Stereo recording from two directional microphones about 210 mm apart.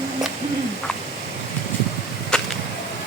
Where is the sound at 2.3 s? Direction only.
5° left (ahead or behind).